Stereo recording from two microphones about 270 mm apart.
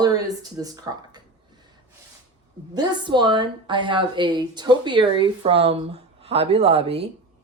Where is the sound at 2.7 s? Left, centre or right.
Centre.